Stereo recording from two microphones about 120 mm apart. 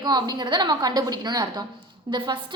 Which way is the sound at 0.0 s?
35° right (ahead or behind).